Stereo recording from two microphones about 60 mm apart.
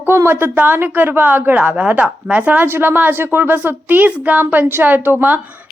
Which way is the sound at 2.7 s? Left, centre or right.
Right.